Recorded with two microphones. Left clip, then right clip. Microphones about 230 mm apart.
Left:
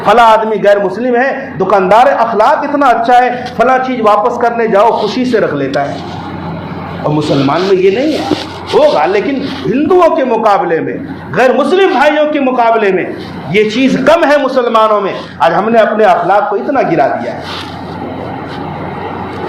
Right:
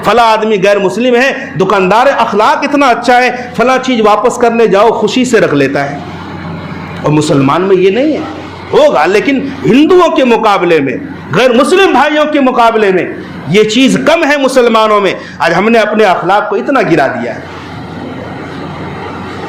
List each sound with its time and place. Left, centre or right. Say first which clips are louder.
0.0 s a man's voice: left 1 dB; right
7.0 s a man's voice: right 3 dB; right